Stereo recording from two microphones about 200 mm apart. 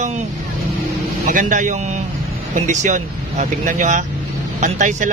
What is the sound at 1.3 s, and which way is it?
A man's voice, 40° right (ahead or behind).